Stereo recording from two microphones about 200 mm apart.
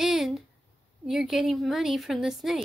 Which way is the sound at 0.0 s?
Centre (ahead or behind).